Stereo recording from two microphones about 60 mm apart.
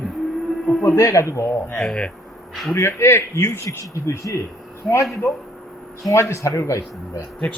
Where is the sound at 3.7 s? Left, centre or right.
Left.